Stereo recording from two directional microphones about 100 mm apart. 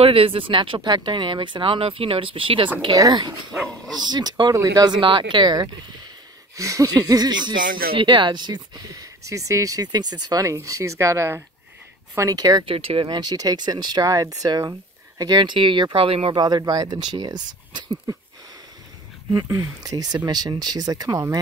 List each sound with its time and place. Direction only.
0.0 s speech: 70° right (ahead or behind)
2.9 s speech: 35° right (ahead or behind)
3.5 s dog: centre (ahead or behind)
4.0 s speech: 45° right (ahead or behind)
6.5 s speech: 30° right (ahead or behind)
12.2 s speech: 40° right (ahead or behind)
12.6 s speech: 70° right (ahead or behind)
13.1 s speech: 40° right (ahead or behind); by 16.3 s 65° right (ahead or behind)
16.3 s speech: 45° right (ahead or behind)
19.6 s speech: 40° right (ahead or behind)